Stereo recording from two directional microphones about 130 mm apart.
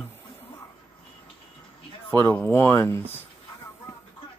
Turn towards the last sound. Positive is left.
turn(degrees=20)  # may be behind; listen again after turning